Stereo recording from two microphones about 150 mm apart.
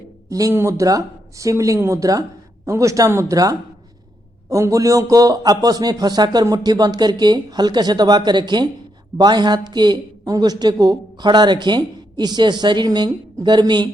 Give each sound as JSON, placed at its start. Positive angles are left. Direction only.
{"t": 0.3, "sound": "a woman's voice", "side_deg": -20}